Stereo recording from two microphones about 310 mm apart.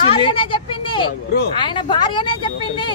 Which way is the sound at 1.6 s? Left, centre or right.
Centre.